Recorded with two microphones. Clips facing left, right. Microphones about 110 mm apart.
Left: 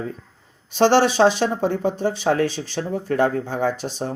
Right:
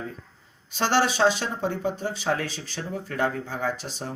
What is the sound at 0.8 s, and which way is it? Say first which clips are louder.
Speech: left 7 dB; 30° left (ahead or behind).